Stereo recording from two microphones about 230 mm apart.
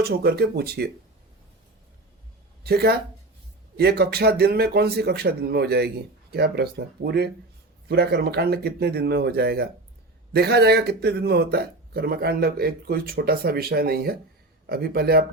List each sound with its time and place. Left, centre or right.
0.0 s speech: right
2.6 s speech: right